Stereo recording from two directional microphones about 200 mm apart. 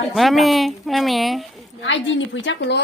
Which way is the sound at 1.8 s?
70° left (ahead or behind).